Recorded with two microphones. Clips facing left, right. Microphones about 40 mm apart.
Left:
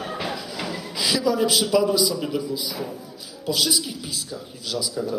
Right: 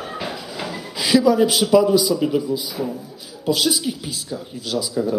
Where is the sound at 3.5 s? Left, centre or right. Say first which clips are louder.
Right 4 dB; right.